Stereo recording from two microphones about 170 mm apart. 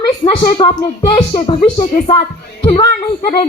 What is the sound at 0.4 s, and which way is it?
Speech, 30° left (ahead or behind).